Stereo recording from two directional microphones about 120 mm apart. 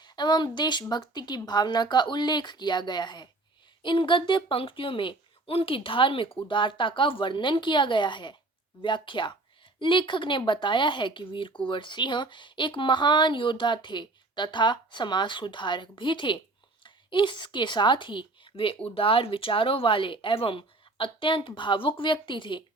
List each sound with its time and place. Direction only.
0.0 s a woman's voice: 40° left (ahead or behind)